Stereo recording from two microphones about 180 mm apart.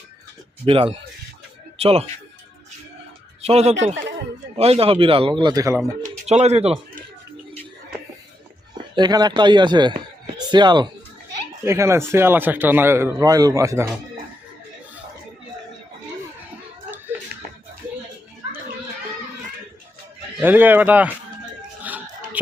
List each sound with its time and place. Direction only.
0.6 s a man's voice: 30° right (ahead or behind)
3.4 s a man's voice: 35° right (ahead or behind); by 5.8 s 20° right (ahead or behind)
6.0 s speech: 40° right (ahead or behind)
9.0 s speech: 25° right (ahead or behind)
10.3 s a sound: 25° right (ahead or behind)
11.6 s a man's voice: 15° right (ahead or behind)
17.3 s a sound: 55° right (ahead or behind)
20.4 s a man's voice: 10° right (ahead or behind)
21.9 s a sound: 10° right (ahead or behind)